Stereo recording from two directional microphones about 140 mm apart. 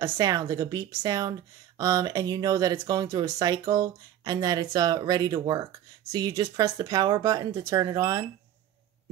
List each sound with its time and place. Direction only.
0.0 s speech: 25° right (ahead or behind)